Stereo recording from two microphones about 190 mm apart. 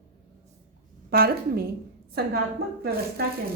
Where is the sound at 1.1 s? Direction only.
55° right (ahead or behind).